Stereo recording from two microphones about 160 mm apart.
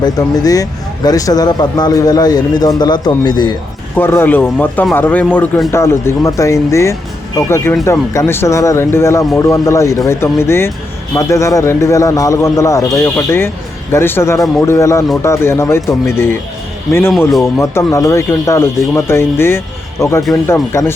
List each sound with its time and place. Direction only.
0.0 s speech: 20° left (ahead or behind)
3.9 s speech: 15° left (ahead or behind)
17.4 s speech: 15° left (ahead or behind)